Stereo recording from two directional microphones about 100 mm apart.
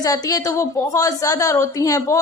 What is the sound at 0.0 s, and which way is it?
A woman's voice, 35° left (ahead or behind).